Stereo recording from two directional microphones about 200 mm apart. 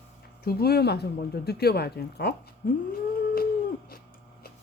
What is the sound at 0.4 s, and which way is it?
Speech, 50° left (ahead or behind).